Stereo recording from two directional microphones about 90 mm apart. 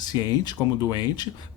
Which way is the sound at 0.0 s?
50° left (ahead or behind).